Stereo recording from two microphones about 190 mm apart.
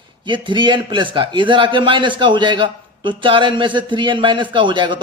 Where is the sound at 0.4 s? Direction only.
25° right (ahead or behind).